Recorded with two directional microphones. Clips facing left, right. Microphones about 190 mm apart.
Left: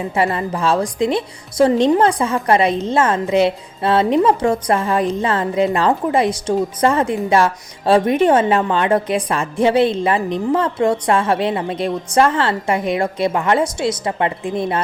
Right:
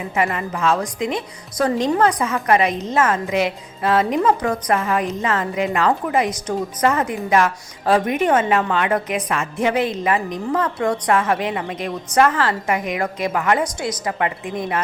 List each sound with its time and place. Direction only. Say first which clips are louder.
0.2 s a woman's voice: left 2 dB; 30° left (ahead or behind)